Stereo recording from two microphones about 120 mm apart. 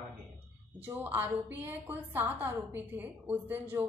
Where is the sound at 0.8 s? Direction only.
15° right (ahead or behind).